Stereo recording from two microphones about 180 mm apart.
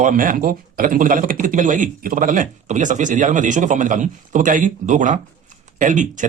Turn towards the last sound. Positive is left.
turn(degrees=-45)  # may be behind; listen again after turning